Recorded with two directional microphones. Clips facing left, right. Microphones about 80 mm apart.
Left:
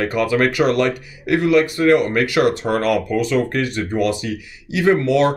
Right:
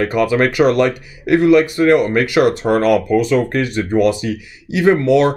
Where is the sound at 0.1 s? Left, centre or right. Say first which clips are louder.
Right 3 dB; right.